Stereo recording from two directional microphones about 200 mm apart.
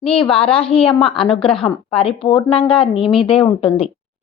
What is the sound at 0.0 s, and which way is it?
A woman's voice, 25° left (ahead or behind).